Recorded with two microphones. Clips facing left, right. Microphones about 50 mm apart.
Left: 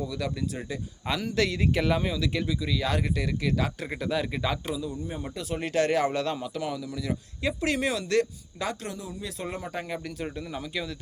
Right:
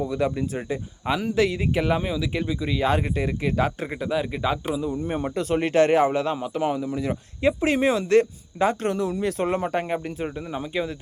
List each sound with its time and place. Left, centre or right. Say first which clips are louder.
0.0 s a man's voice: right 7 dB; right
1.0 s speech: right 5 dB; centre
3.8 s speech: right 3 dB; centre
4.8 s a man's voice: right 7 dB; right
6.1 s speech: right 5 dB; centre
8.9 s speech: right 12 dB; right
10.0 s speech: right 4 dB; right